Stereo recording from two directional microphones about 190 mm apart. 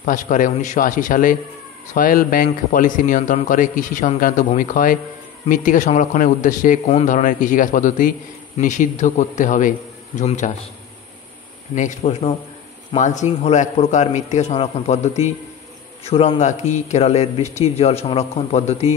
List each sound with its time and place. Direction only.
0.0 s a man's voice: 40° left (ahead or behind)
11.7 s a man's voice: 40° left (ahead or behind)